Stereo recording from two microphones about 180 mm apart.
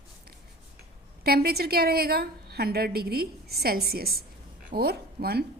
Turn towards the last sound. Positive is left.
turn(degrees=-60)  # may be behind; listen again after turning